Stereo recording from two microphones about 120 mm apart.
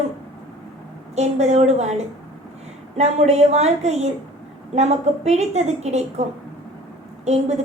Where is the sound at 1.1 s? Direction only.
70° right (ahead or behind).